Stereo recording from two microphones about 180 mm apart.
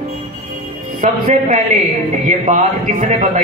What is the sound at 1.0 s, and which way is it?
A man's voice, 40° right (ahead or behind).